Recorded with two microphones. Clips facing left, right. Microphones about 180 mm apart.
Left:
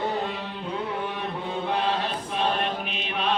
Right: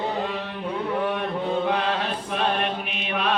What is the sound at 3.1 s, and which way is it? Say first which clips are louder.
Mantra: right 2 dB; 65° right (ahead or behind).